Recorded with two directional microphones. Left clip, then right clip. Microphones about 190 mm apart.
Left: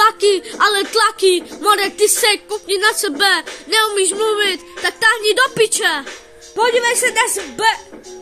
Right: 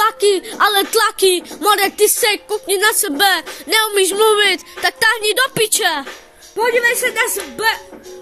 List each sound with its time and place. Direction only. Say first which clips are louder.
0.0 s speech: left 1 dB; 20° right (ahead or behind)
6.5 s speech: even; 15° left (ahead or behind)